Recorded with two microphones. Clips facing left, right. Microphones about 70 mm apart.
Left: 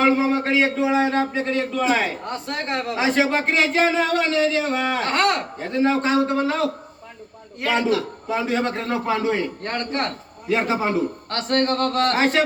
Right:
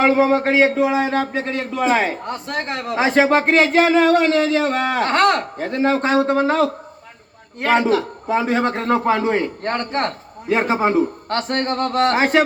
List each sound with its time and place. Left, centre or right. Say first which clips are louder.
0.0 s a man's voice: right 4 dB; right
0.9 s a man's voice: right 1 dB; right
1.8 s a man's voice: right 7 dB; right
3.4 s a sound: right 5 dB; right
3.8 s a sound: right 6 dB; right
5.6 s a man's voice: right 1 dB; right